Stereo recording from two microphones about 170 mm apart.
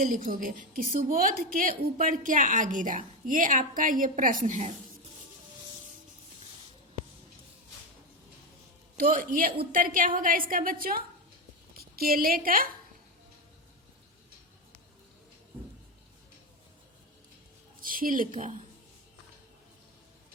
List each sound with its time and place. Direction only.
0.0 s a woman's voice: 55° right (ahead or behind)
9.0 s a woman's voice: 55° right (ahead or behind)
17.7 s speech: 55° right (ahead or behind)